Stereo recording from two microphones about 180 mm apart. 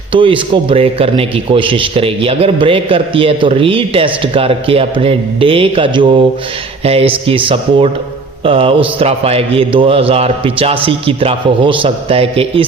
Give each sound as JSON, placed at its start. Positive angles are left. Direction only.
{"t": 0.1, "sound": "a man's voice", "side_deg": -30}